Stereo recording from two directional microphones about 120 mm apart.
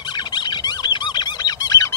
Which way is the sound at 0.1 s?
35° left (ahead or behind).